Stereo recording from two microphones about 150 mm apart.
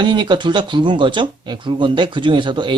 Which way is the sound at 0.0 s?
30° right (ahead or behind).